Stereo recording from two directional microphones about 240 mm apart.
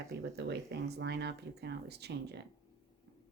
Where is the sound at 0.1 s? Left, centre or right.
Right.